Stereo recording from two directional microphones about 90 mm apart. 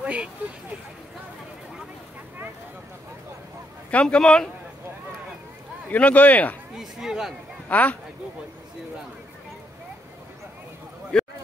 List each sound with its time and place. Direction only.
0.0 s vehicle: 15° right (ahead or behind)
3.9 s speech: 10° left (ahead or behind)
5.9 s speech: 15° left (ahead or behind)
6.7 s speech: 5° right (ahead or behind)
7.6 s speech: 15° left (ahead or behind)
11.1 s a sound: 10° left (ahead or behind)